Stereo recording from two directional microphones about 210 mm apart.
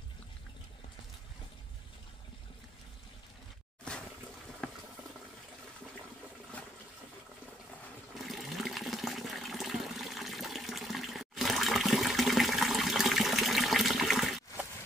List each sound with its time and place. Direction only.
4.6 s boiling: 5° left (ahead or behind)
8.3 s toilet flush: centre (ahead or behind)